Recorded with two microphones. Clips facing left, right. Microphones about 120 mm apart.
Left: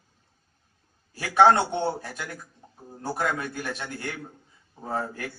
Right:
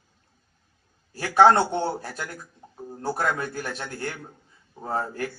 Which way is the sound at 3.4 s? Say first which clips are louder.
Right 1 dB; 40° right (ahead or behind).